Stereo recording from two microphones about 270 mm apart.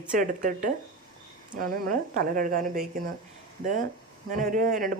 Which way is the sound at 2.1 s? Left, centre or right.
Right.